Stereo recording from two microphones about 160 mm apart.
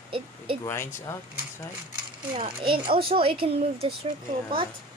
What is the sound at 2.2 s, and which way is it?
Speech, 30° right (ahead or behind).